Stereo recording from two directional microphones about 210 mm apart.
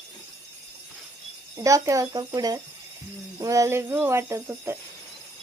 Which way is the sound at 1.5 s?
15° right (ahead or behind).